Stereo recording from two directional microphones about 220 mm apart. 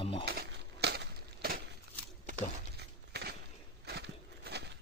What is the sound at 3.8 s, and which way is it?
Walk, 50° right (ahead or behind).